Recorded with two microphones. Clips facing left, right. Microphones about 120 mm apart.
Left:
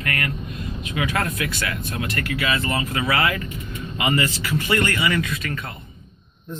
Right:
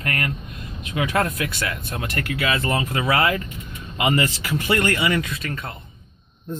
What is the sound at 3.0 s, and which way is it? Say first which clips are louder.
Speech: right 2 dB; 40° right (ahead or behind).